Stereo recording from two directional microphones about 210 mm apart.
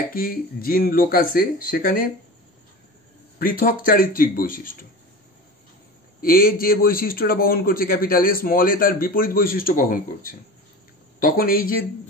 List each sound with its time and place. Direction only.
0.1 s a man's voice: 45° left (ahead or behind)
3.3 s a man's voice: 40° left (ahead or behind)
6.2 s a man's voice: 45° left (ahead or behind)